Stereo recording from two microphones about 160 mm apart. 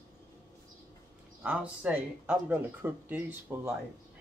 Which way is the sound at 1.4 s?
10° right (ahead or behind).